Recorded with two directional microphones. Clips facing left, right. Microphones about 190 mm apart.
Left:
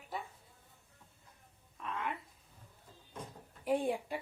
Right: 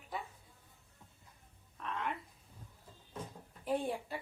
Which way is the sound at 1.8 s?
5° left (ahead or behind).